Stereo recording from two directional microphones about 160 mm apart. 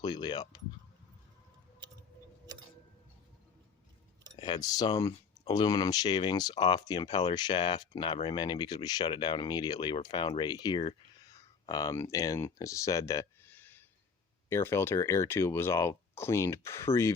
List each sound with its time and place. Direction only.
0.0 s speech: 25° left (ahead or behind)
4.4 s speech: 30° left (ahead or behind)